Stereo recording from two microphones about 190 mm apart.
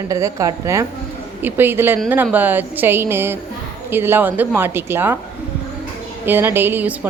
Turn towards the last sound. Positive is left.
turn(degrees=-10)  # may be behind; listen again after turning